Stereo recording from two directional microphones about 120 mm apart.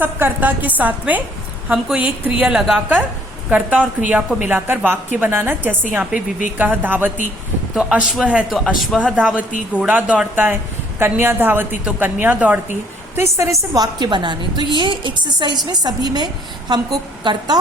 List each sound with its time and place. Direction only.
0.0 s a woman's voice: 20° right (ahead or behind); by 2.8 s centre (ahead or behind)
3.5 s a woman's voice: 10° right (ahead or behind); by 17.6 s 35° right (ahead or behind)